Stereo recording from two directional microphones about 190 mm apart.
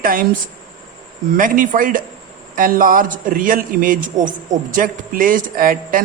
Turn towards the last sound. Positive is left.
turn(degrees=-45)  # may be behind; listen again after turning